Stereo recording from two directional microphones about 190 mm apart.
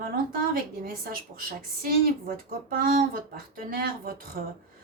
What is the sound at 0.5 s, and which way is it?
Speech, 50° right (ahead or behind).